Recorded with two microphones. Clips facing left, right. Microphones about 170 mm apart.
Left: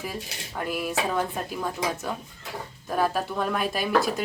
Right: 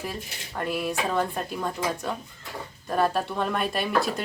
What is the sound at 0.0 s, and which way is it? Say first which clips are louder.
Speech: even; centre (ahead or behind).